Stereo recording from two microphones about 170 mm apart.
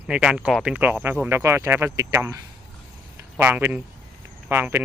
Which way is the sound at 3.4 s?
15° right (ahead or behind).